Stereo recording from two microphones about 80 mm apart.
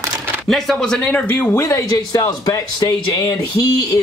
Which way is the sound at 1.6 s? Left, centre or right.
Left.